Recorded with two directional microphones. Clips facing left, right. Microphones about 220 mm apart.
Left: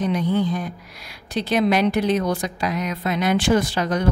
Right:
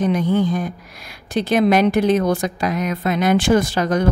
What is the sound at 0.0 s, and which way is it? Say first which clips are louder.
A woman's voice: right 3 dB; 50° right (ahead or behind).